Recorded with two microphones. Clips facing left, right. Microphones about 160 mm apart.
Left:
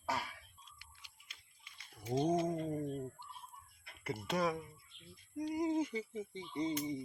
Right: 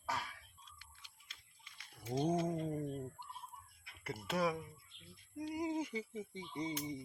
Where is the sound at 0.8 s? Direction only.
10° left (ahead or behind).